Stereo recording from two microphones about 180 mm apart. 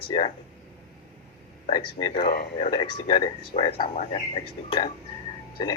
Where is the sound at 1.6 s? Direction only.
25° left (ahead or behind).